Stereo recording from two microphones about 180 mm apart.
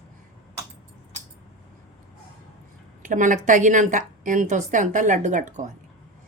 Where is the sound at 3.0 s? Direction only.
45° right (ahead or behind).